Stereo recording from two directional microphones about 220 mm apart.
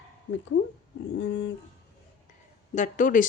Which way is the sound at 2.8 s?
35° left (ahead or behind).